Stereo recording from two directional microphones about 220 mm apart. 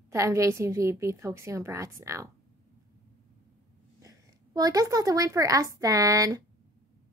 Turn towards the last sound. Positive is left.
turn(degrees=-15)  # may be behind; listen again after turning